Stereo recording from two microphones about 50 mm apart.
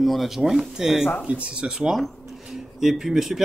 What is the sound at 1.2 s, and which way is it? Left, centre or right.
Speech, right.